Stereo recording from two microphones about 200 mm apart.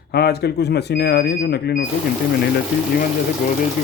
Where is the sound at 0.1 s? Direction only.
55° left (ahead or behind).